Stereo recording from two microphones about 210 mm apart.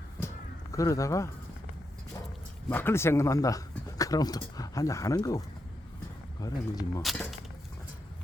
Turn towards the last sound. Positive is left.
turn(degrees=0)  # may be behind; listen again after turning